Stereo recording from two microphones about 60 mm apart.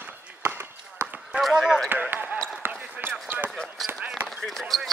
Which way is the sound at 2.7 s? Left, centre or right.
Right.